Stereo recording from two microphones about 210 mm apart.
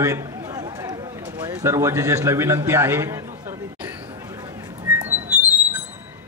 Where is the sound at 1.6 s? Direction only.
15° right (ahead or behind).